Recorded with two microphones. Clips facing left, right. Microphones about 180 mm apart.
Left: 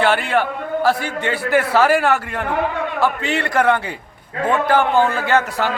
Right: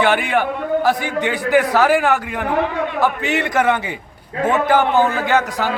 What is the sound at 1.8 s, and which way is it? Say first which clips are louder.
Speech: even; centre (ahead or behind).